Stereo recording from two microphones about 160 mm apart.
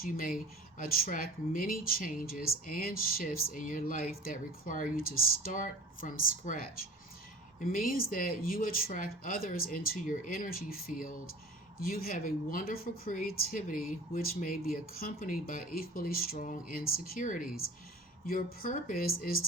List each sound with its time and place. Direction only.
0.0 s speech: 65° left (ahead or behind)
7.6 s speech: 60° left (ahead or behind)